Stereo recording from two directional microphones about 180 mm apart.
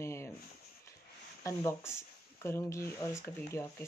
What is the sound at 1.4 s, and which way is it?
Speech, 15° left (ahead or behind).